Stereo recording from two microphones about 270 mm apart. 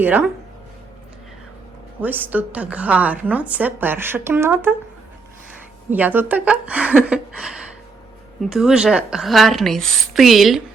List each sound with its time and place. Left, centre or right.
0.0 s a woman's voice: centre
2.0 s a woman's voice: centre
5.9 s a woman's voice: centre